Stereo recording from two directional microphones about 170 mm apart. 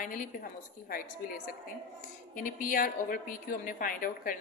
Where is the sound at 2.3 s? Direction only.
50° left (ahead or behind).